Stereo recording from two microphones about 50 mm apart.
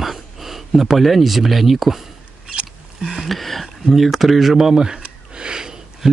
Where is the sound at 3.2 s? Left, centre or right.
Centre.